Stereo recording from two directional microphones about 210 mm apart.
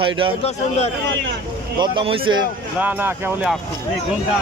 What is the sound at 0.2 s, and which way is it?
Speech, 25° right (ahead or behind).